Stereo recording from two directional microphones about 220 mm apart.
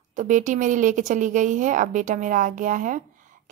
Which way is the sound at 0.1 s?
35° right (ahead or behind).